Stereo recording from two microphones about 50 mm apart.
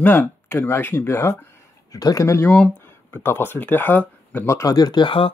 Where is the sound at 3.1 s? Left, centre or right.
Left.